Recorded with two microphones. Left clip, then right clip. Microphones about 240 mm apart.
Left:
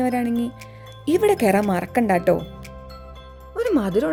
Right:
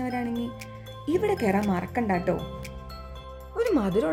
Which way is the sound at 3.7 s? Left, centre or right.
Left.